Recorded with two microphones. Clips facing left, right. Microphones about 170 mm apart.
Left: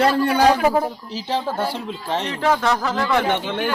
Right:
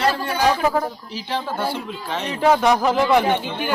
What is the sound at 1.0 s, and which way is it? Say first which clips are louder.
Speech: left 2 dB; 40° left (ahead or behind).